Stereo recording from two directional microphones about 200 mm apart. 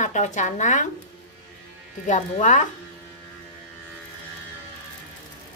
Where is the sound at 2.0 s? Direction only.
40° left (ahead or behind).